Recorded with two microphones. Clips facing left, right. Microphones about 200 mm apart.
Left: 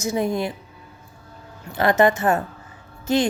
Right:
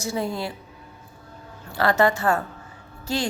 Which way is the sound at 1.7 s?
20° left (ahead or behind).